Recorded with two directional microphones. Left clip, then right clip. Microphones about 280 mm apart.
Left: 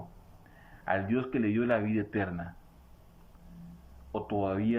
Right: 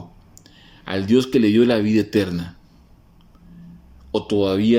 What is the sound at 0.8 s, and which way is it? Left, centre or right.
Speech, right.